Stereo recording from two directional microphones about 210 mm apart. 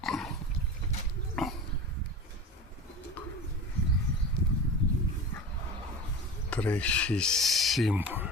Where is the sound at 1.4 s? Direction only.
Centre (ahead or behind).